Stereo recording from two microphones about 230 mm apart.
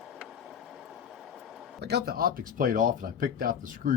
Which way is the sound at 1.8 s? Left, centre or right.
Right.